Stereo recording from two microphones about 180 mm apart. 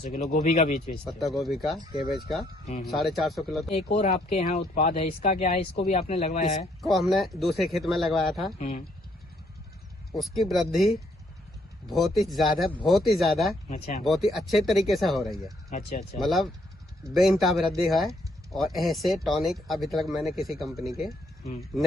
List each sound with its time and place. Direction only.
0.0 s speech: 40° left (ahead or behind)
1.0 s speech: centre (ahead or behind)
3.7 s speech: 35° left (ahead or behind)
4.7 s speech: 50° left (ahead or behind)
6.8 s speech: centre (ahead or behind)
8.5 s speech: 40° left (ahead or behind)
10.1 s speech: centre (ahead or behind)
13.7 s speech: 40° left (ahead or behind)
14.0 s speech: centre (ahead or behind)